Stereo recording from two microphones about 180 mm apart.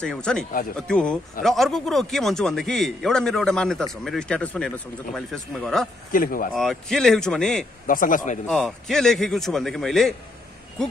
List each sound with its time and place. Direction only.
0.0 s a man's voice: 5° left (ahead or behind)
6.1 s a man's voice: 50° left (ahead or behind)
6.5 s a man's voice: centre (ahead or behind)
7.8 s a man's voice: 50° left (ahead or behind)
8.5 s a man's voice: centre (ahead or behind)